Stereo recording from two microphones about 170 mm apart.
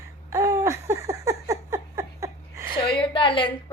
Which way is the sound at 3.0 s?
30° left (ahead or behind).